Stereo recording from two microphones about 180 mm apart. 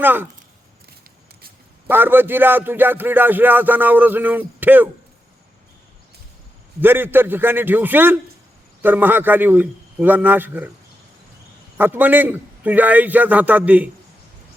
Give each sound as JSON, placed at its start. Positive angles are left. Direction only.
{"t": 0.0, "sound": "music", "side_deg": -10}
{"t": 1.9, "sound": "music", "side_deg": -10}
{"t": 6.7, "sound": "music", "side_deg": -10}
{"t": 11.8, "sound": "music", "side_deg": -10}